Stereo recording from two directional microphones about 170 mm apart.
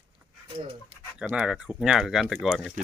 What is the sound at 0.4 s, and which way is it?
Speech, 30° right (ahead or behind).